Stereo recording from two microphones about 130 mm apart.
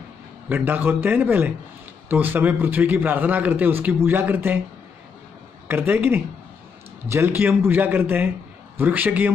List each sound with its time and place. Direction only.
0.5 s a man's voice: 15° right (ahead or behind)
5.7 s a man's voice: 15° right (ahead or behind)